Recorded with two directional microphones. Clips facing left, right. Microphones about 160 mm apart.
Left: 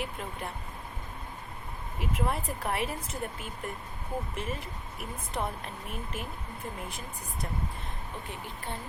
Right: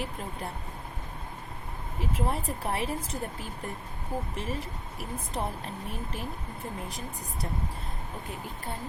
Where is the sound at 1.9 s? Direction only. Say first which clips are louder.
Right 1 dB; 30° right (ahead or behind).